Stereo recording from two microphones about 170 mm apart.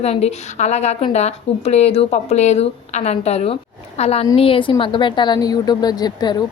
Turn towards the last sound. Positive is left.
turn(degrees=25)  # may be behind; listen again after turning